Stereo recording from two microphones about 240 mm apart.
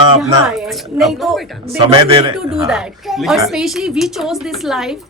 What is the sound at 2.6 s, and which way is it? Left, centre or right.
A woman's voice, centre.